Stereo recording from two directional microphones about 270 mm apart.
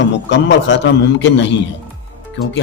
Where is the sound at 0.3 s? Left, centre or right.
Left.